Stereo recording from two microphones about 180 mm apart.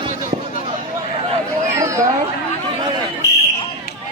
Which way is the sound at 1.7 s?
15° right (ahead or behind).